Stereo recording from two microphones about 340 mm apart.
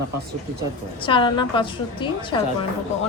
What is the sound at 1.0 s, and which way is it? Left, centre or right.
A woman's voice, centre.